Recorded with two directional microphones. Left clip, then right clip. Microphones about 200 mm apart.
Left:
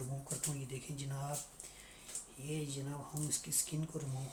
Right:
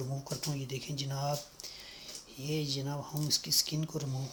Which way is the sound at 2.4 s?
40° right (ahead or behind).